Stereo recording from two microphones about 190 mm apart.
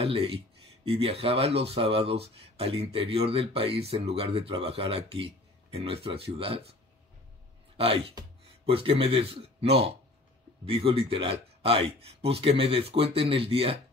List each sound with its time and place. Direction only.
0.0 s speech: 30° right (ahead or behind)
7.7 s speech: 30° right (ahead or behind)